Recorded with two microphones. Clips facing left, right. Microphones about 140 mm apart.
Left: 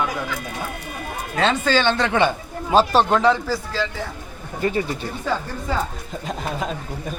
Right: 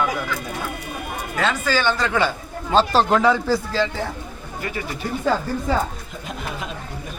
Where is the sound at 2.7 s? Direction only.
5° left (ahead or behind).